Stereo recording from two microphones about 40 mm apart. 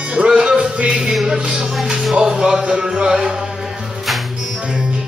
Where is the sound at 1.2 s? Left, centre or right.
Centre.